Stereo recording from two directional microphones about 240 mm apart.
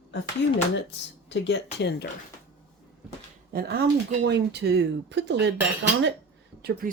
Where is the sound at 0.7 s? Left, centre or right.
Left.